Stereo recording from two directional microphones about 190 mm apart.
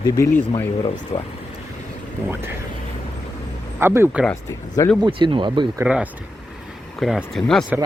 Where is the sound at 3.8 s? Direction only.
10° right (ahead or behind).